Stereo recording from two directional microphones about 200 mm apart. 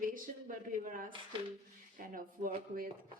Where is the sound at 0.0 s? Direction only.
45° right (ahead or behind).